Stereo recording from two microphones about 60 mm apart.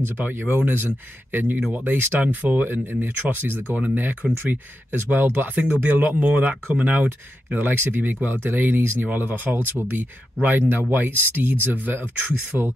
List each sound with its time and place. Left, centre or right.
0.0 s speech: right